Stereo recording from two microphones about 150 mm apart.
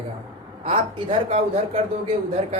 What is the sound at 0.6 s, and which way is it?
Speech, 40° right (ahead or behind).